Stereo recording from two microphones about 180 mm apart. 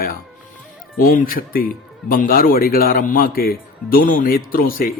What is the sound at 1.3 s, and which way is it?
A man's voice, 50° left (ahead or behind).